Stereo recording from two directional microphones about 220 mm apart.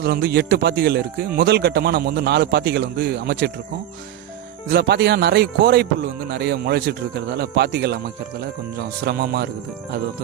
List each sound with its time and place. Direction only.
0.0 s speech: 45° right (ahead or behind)
4.7 s speech: 50° right (ahead or behind)
9.0 s speech: 45° right (ahead or behind)